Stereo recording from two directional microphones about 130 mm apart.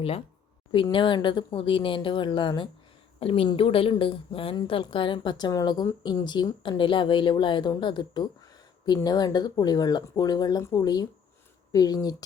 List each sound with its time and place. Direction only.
0.7 s a woman's voice: 40° left (ahead or behind)